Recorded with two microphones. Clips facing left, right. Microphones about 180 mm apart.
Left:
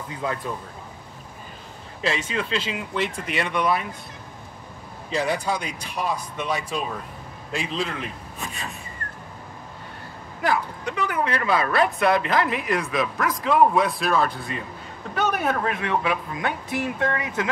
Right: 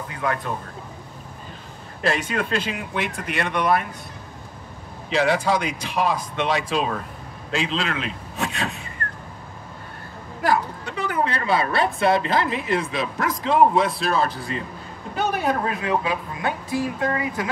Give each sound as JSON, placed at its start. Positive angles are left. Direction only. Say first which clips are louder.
{"t": 0.1, "sound": "speech", "louder": "right 2 dB", "side_deg": -70}
{"t": 2.0, "sound": "speech", "louder": "right 3 dB", "side_deg": -55}
{"t": 5.1, "sound": "speech", "louder": "right 4 dB", "side_deg": -85}
{"t": 10.4, "sound": "a woman's voice", "louder": "right 2 dB", "side_deg": -35}
{"t": 15.4, "sound": "a woman's voice", "louder": "right 1 dB", "side_deg": -30}
{"t": 17.2, "sound": "speech", "louder": "right 1 dB", "side_deg": 20}